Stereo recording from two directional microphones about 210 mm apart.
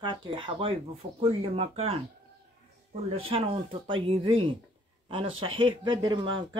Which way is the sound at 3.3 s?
25° right (ahead or behind).